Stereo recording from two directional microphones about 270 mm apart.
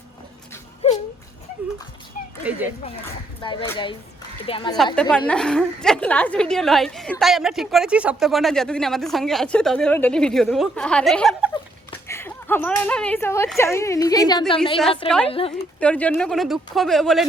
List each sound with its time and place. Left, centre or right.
0.8 s a sound: left
2.4 s speech: centre
3.4 s speech: centre
5.1 s a woman's voice: centre
11.5 s speech: centre
15.8 s a woman's voice: centre